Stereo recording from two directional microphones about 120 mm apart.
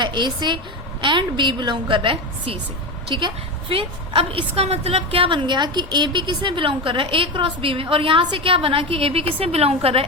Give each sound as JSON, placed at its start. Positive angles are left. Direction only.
{"t": 0.0, "sound": "a woman's voice", "side_deg": -40}